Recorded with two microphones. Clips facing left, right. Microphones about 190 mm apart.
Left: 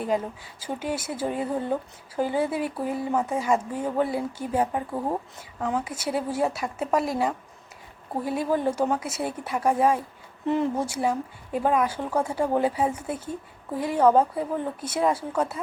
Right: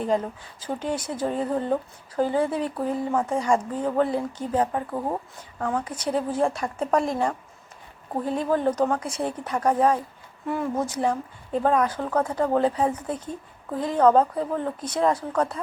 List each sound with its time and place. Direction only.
0.6 s speech: 5° left (ahead or behind)
10.4 s speech: 20° left (ahead or behind)
10.8 s speech: 10° left (ahead or behind)